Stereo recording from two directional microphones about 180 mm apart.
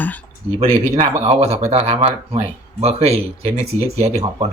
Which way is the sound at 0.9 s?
35° right (ahead or behind).